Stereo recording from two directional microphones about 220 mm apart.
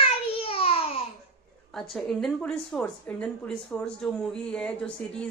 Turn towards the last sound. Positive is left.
turn(degrees=5)  # may be behind; listen again after turning